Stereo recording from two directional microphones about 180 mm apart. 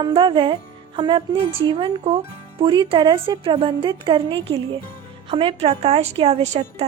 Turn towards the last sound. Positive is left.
turn(degrees=-35)  # may be behind; listen again after turning